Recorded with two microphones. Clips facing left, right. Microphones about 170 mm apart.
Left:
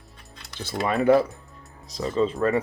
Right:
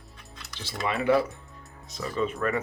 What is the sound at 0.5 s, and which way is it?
Speech, 55° left (ahead or behind).